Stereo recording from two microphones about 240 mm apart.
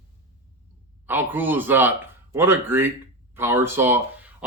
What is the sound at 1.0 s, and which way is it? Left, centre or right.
Speech, centre.